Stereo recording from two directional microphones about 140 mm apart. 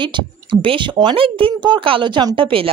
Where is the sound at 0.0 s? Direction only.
35° right (ahead or behind).